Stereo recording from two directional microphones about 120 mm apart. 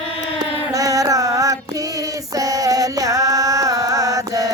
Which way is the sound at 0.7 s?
30° right (ahead or behind).